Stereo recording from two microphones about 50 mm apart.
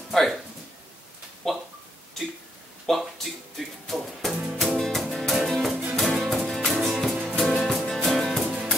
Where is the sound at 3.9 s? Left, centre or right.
Centre.